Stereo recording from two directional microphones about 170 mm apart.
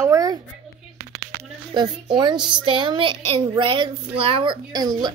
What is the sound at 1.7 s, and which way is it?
Speech, 25° right (ahead or behind).